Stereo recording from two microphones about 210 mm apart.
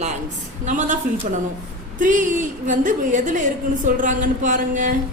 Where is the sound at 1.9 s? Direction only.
40° right (ahead or behind).